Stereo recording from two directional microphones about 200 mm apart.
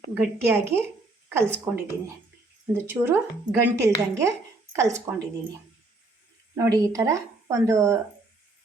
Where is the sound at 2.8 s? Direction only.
10° right (ahead or behind).